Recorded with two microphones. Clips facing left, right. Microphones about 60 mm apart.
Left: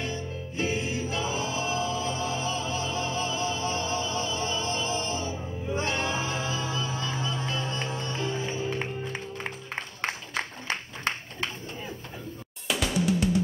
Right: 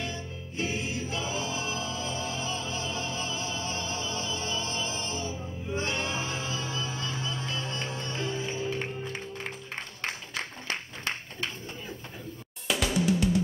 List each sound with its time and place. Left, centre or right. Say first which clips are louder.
0.6 s music: left 3 dB; left
10.0 s a sound: left 4 dB; left
12.6 s drum: even; centre